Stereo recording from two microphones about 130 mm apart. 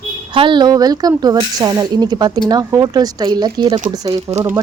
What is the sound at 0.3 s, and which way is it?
Speech, 35° right (ahead or behind).